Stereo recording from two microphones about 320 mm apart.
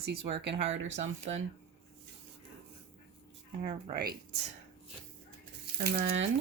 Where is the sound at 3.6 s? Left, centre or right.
Right.